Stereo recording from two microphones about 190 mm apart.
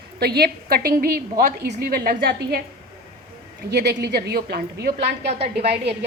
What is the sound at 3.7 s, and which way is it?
A woman's voice, 60° right (ahead or behind).